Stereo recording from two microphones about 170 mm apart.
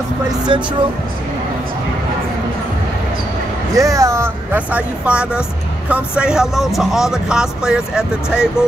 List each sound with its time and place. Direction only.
0.5 s speech: 30° right (ahead or behind)
3.7 s speech: 20° right (ahead or behind)